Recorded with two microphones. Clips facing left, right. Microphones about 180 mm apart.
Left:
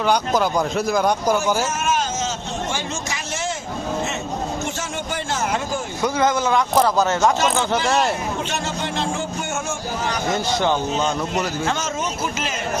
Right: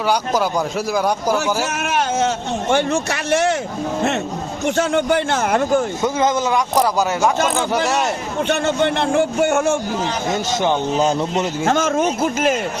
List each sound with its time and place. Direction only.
0.1 s speech: 10° right (ahead or behind)
1.6 s a man's voice: 65° right (ahead or behind)
4.6 s a man's voice: 60° right (ahead or behind)
6.0 s a man's voice: 20° right (ahead or behind)
8.4 s a man's voice: 60° right (ahead or behind)
10.2 s speech: 20° right (ahead or behind)
11.6 s speech: 50° right (ahead or behind)